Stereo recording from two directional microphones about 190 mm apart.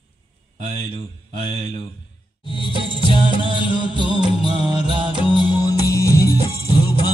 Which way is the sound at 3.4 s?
25° right (ahead or behind).